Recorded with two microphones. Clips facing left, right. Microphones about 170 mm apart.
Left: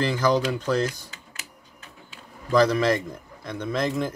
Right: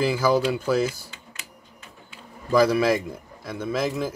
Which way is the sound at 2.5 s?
10° right (ahead or behind).